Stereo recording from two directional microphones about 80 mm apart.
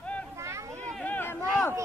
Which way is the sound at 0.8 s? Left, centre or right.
Centre.